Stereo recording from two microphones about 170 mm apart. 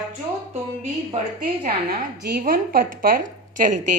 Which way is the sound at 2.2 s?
55° right (ahead or behind).